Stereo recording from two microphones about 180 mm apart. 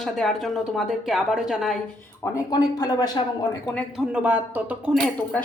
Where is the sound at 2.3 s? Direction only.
20° left (ahead or behind).